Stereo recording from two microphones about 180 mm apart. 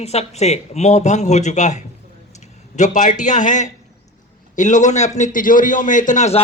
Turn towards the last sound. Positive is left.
turn(degrees=40)  # may be behind; listen again after turning